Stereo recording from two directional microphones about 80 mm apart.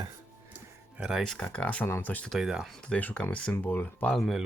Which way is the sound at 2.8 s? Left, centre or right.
Centre.